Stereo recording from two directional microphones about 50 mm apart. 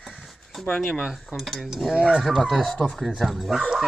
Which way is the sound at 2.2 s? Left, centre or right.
Centre.